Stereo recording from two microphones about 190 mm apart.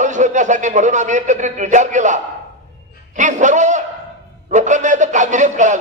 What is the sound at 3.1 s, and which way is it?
Speech, 40° right (ahead or behind).